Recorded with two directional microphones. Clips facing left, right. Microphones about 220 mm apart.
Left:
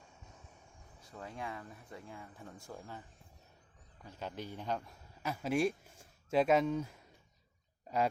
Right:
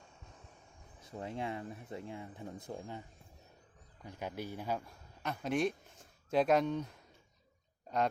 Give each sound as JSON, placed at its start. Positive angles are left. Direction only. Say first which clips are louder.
{"t": 1.0, "sound": "speech", "louder": "right 5 dB", "side_deg": -25}
{"t": 4.0, "sound": "a man's voice", "louder": "right 2 dB", "side_deg": -15}
{"t": 5.2, "sound": "speech", "louder": "left 1 dB", "side_deg": 5}